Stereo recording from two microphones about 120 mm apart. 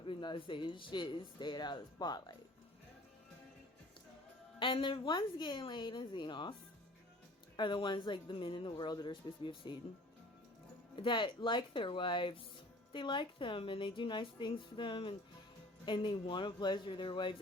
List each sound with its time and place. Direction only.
0.0 s speech: 45° left (ahead or behind)
4.6 s speech: 45° left (ahead or behind)
7.5 s speech: 40° left (ahead or behind)
10.9 s a woman's voice: 45° left (ahead or behind)